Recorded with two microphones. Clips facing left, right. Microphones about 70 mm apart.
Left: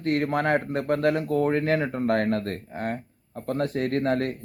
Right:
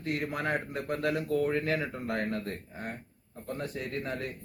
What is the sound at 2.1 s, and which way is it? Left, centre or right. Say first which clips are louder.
Speech: left 9 dB; left.